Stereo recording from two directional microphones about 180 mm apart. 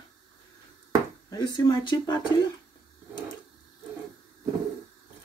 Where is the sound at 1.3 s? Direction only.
20° left (ahead or behind).